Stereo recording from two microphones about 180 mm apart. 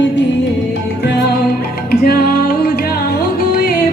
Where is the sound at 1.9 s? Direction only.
55° left (ahead or behind).